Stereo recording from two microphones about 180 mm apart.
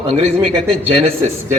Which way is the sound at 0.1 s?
35° right (ahead or behind).